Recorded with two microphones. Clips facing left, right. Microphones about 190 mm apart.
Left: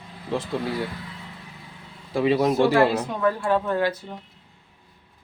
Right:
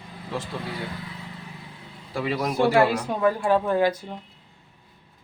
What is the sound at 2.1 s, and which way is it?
Speech, 20° left (ahead or behind).